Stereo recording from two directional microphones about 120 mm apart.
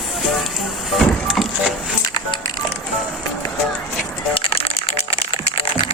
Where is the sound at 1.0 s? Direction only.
Centre (ahead or behind).